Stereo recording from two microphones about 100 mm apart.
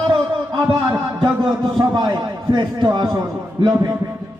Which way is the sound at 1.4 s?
50° right (ahead or behind).